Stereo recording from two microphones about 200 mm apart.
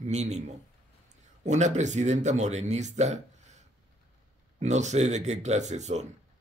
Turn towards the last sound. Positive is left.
turn(degrees=-35)  # may be behind; listen again after turning